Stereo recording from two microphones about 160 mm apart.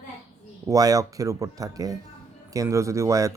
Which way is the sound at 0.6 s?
20° right (ahead or behind).